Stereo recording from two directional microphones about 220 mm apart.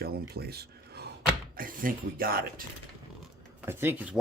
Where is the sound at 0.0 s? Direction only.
45° right (ahead or behind).